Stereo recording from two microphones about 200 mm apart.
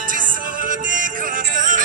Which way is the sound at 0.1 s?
40° right (ahead or behind).